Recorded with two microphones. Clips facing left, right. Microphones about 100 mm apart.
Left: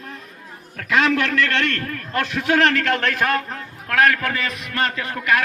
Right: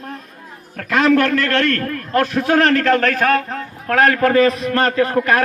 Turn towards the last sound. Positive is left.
turn(degrees=-35)  # may be behind; listen again after turning